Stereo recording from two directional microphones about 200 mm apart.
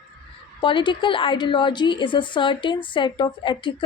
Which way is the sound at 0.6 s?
25° left (ahead or behind).